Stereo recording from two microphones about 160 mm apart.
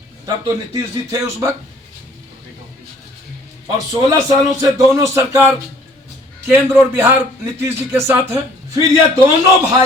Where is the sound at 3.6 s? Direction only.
25° right (ahead or behind).